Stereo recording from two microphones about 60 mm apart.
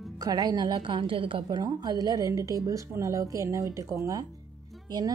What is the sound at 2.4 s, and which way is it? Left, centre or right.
Speech, right.